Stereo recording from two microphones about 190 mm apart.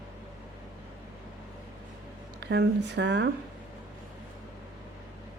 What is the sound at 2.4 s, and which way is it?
Speech, 65° right (ahead or behind).